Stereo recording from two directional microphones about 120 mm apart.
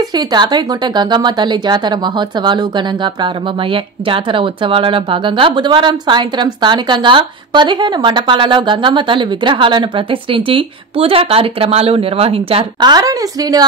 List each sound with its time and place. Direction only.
0.1 s speech: 35° right (ahead or behind); by 12.6 s 55° right (ahead or behind)
12.8 s speech: 30° right (ahead or behind)